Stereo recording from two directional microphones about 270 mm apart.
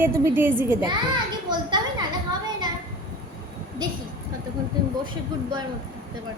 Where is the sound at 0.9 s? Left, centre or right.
Centre.